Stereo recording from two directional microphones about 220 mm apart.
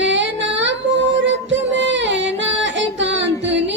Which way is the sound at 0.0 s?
55° right (ahead or behind).